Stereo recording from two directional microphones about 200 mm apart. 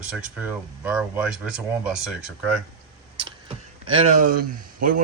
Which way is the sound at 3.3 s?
25° right (ahead or behind).